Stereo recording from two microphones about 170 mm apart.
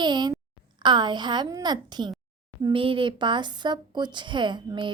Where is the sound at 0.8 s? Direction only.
25° right (ahead or behind).